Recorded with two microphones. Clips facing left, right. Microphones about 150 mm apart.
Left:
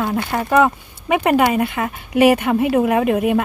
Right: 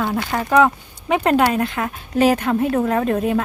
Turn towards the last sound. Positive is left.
turn(degrees=10)  # may be behind; listen again after turning